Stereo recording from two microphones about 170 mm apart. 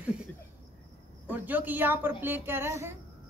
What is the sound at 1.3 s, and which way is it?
A woman's voice, 10° right (ahead or behind).